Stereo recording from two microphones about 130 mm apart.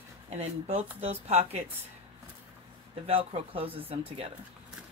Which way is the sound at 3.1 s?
45° right (ahead or behind).